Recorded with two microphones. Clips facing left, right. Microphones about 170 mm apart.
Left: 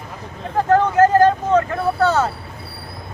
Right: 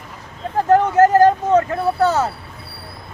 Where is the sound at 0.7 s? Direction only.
20° right (ahead or behind).